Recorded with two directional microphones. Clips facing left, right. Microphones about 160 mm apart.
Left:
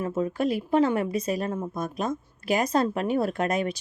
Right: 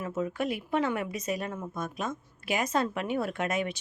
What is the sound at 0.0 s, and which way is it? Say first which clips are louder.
Speech: left 5 dB; 30° left (ahead or behind).